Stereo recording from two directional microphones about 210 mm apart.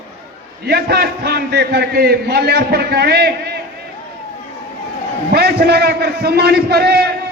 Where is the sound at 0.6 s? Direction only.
50° right (ahead or behind).